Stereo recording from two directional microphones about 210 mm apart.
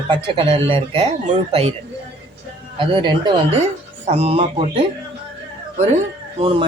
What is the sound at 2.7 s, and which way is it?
Speech, 20° right (ahead or behind).